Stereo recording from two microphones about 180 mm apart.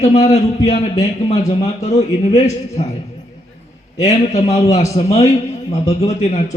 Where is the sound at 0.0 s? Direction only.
35° left (ahead or behind).